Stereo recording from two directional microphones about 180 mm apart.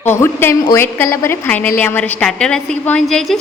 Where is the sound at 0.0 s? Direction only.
10° left (ahead or behind).